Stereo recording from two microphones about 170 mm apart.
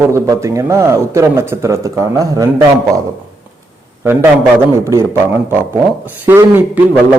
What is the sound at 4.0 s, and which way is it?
A man's voice, 15° right (ahead or behind).